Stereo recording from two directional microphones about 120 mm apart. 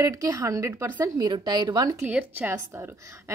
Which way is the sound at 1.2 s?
35° right (ahead or behind).